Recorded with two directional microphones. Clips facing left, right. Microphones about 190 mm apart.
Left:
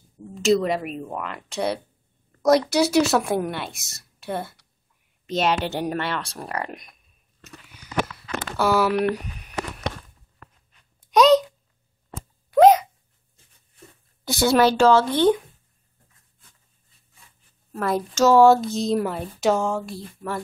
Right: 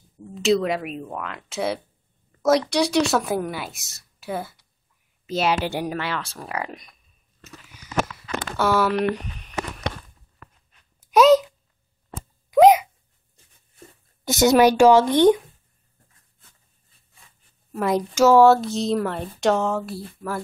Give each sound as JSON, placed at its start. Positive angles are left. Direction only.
{"t": 0.3, "sound": "a woman's voice", "side_deg": 0}
{"t": 8.5, "sound": "a sound", "side_deg": 0}
{"t": 11.0, "sound": "a sound", "side_deg": -5}
{"t": 12.4, "sound": "hiccup", "side_deg": -10}
{"t": 14.2, "sound": "a woman's voice", "side_deg": -20}
{"t": 17.7, "sound": "a woman's voice", "side_deg": -15}